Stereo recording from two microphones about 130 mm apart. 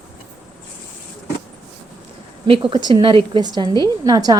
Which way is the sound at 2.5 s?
40° right (ahead or behind).